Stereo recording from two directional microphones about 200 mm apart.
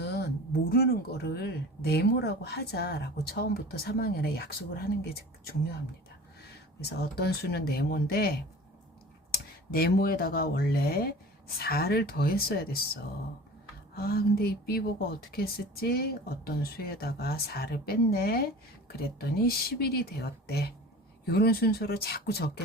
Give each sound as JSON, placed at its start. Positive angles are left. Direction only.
{"t": 0.0, "sound": "a sound", "side_deg": 50}
{"t": 0.7, "sound": "speech", "side_deg": 50}
{"t": 6.8, "sound": "speech", "side_deg": 50}